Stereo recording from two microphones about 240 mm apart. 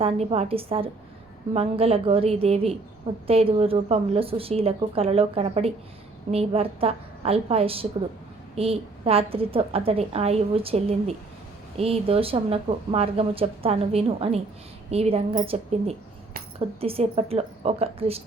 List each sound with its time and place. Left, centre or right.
0.0 s speech: right